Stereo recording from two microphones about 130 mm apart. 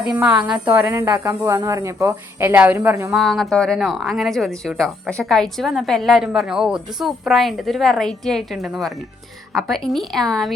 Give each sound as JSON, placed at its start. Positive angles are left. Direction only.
{"t": 0.0, "sound": "a woman's voice", "side_deg": -10}
{"t": 0.9, "sound": "speech", "side_deg": -30}
{"t": 3.1, "sound": "speech", "side_deg": 0}